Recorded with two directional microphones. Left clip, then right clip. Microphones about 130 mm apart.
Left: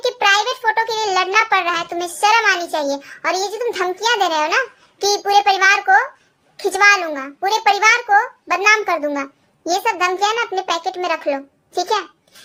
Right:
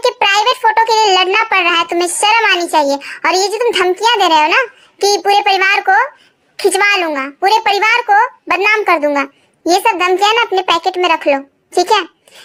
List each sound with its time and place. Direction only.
0.0 s child singing: 40° right (ahead or behind)
6.6 s a child's voice: 45° right (ahead or behind)